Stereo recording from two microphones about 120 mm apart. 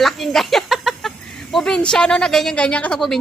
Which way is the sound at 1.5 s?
5° left (ahead or behind).